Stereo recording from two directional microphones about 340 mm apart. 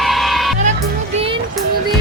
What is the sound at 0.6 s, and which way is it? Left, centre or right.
Music, centre.